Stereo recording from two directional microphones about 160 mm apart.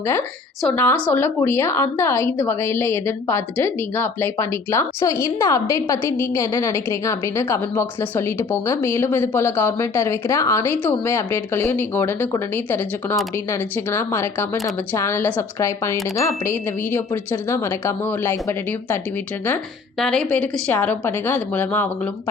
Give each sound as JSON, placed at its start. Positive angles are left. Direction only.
{"t": 0.8, "sound": "a woman's voice", "side_deg": 10}
{"t": 20.0, "sound": "a woman's voice", "side_deg": 5}